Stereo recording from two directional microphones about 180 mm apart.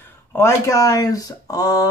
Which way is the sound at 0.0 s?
15° left (ahead or behind).